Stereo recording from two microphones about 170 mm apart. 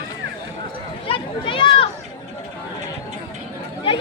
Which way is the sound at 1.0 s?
30° left (ahead or behind).